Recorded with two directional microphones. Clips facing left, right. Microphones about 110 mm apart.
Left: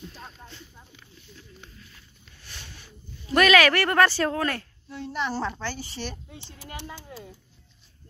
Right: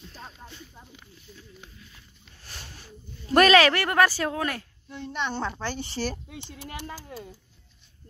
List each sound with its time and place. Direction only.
1.3 s a sound: 10° right (ahead or behind)
2.4 s a sound: 40° right (ahead or behind)
3.3 s speech: 30° right (ahead or behind)
3.7 s speech: 15° right (ahead or behind)
4.8 s a woman's voice: 5° left (ahead or behind)
5.6 s speech: 20° right (ahead or behind)
5.9 s speech: 35° right (ahead or behind)